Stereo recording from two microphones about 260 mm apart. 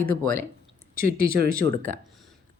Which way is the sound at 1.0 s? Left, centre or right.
Right.